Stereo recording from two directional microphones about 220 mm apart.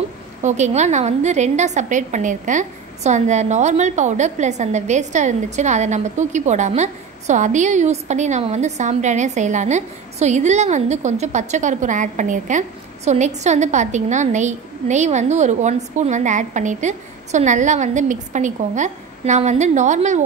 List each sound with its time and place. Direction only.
0.4 s a woman's voice: 30° right (ahead or behind)